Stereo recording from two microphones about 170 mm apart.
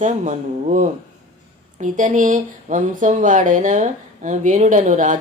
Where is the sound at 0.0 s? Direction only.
45° right (ahead or behind).